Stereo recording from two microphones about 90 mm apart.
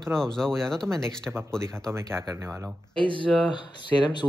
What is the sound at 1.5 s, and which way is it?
Speech, 30° right (ahead or behind).